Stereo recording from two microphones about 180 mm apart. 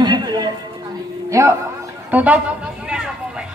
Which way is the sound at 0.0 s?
25° right (ahead or behind).